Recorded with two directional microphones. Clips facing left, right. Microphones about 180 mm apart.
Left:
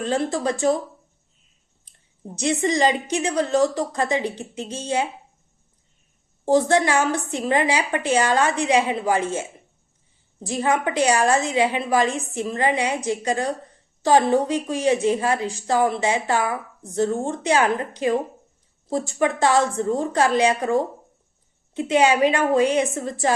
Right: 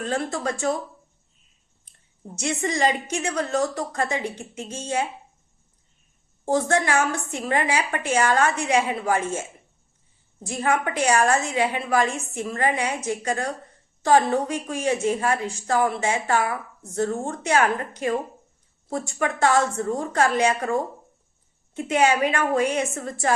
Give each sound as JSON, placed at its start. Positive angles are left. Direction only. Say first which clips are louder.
{"t": 0.0, "sound": "speech", "louder": "left 4 dB", "side_deg": 35}
{"t": 1.8, "sound": "a sound", "louder": "left 3 dB", "side_deg": 35}
{"t": 2.6, "sound": "speech", "louder": "left 2 dB", "side_deg": 35}
{"t": 6.4, "sound": "a woman's voice", "louder": "left 4 dB", "side_deg": 35}
{"t": 16.9, "sound": "a woman's voice", "louder": "left 3 dB", "side_deg": 20}
{"t": 17.2, "sound": "speech", "louder": "left 2 dB", "side_deg": 30}
{"t": 18.9, "sound": "speech", "louder": "left 4 dB", "side_deg": 35}
{"t": 22.8, "sound": "a woman's voice", "louder": "left 4 dB", "side_deg": 20}